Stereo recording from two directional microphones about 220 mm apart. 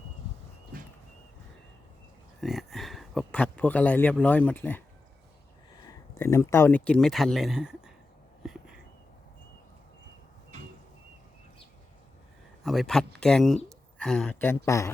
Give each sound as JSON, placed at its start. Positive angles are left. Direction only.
{"t": 2.4, "sound": "speech", "side_deg": 0}
{"t": 6.1, "sound": "speech", "side_deg": 10}
{"t": 8.4, "sound": "a sound", "side_deg": -5}
{"t": 12.6, "sound": "a woman's voice", "side_deg": 0}